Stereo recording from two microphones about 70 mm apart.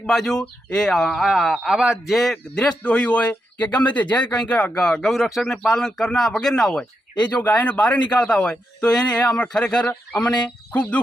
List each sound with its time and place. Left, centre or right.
0.0 s speech: centre
2.0 s speech: centre
2.6 s a man's voice: centre
10.2 s a man's voice: centre